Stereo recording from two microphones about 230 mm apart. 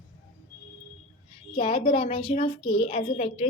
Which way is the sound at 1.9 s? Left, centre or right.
Left.